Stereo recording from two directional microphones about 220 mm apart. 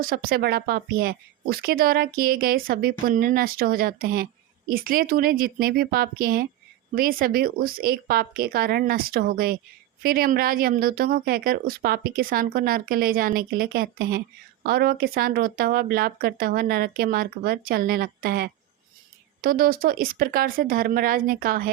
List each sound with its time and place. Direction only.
0.0 s speech: 40° right (ahead or behind)